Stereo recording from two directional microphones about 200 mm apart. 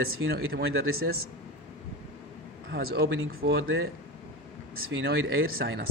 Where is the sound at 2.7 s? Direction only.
55° right (ahead or behind).